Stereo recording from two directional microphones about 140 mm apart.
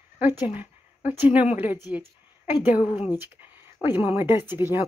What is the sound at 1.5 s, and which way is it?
Speech, 15° right (ahead or behind).